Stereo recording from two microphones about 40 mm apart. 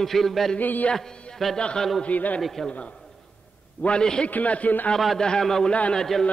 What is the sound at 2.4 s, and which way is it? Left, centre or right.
Speech, centre.